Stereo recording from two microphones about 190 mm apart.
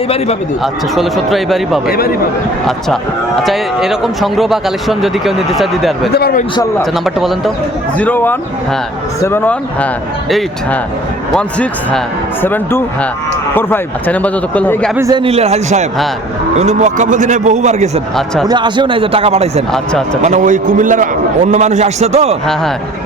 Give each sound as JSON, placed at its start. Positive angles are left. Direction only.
{"t": 0.6, "sound": "speech", "side_deg": 0}
{"t": 3.4, "sound": "speech", "side_deg": 0}
{"t": 6.1, "sound": "a man's voice", "side_deg": 55}
{"t": 6.9, "sound": "speech", "side_deg": 0}
{"t": 14.9, "sound": "a man's voice", "side_deg": -15}
{"t": 15.2, "sound": "a man's voice", "side_deg": -30}
{"t": 18.4, "sound": "speech", "side_deg": -25}
{"t": 19.7, "sound": "speech", "side_deg": 5}
{"t": 20.2, "sound": "a man's voice", "side_deg": -40}